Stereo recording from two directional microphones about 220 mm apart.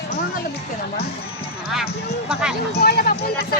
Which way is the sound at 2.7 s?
45° left (ahead or behind).